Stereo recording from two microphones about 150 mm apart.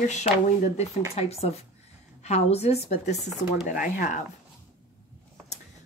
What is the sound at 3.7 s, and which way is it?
Speech, 60° left (ahead or behind).